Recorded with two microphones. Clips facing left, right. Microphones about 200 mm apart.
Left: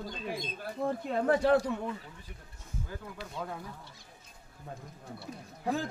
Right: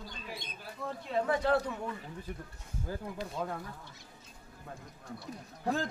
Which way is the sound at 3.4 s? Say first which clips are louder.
Right 2 dB; 10° right (ahead or behind).